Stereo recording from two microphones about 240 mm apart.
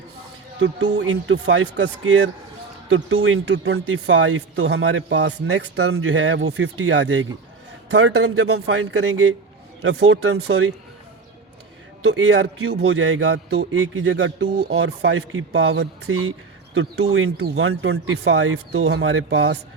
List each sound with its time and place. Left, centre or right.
0.6 s speech: right
12.0 s speech: right
13.7 s speech: right
16.0 s speech: right